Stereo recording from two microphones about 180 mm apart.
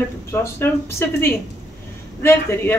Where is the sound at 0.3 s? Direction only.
15° left (ahead or behind).